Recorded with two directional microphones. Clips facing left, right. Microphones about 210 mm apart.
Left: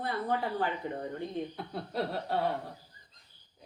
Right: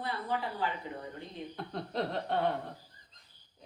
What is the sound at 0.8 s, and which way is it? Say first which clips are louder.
Speech: left 5 dB; 50° left (ahead or behind).